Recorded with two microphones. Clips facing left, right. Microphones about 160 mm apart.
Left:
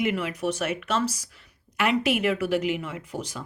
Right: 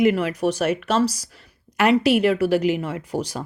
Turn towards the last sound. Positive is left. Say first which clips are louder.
# right 7 dB
turn(degrees=-40)  # may be behind; listen again after turning